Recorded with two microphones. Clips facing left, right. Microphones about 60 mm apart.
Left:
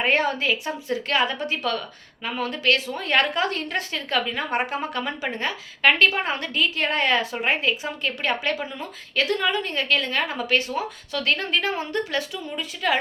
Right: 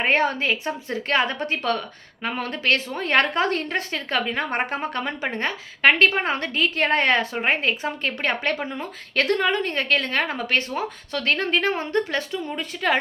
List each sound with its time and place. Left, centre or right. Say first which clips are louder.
0.0 s a woman's voice: right 1 dB; right